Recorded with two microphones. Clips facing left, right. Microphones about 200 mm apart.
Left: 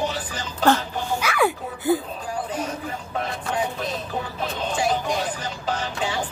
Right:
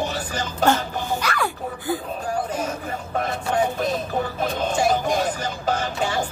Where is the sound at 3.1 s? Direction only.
45° right (ahead or behind).